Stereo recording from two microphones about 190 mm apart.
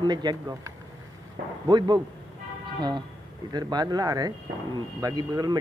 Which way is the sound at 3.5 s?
20° right (ahead or behind).